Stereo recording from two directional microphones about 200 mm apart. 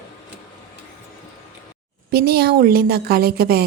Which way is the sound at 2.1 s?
50° right (ahead or behind).